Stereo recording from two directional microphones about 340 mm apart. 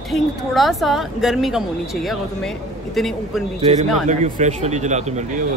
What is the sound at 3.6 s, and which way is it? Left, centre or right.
Speech, centre.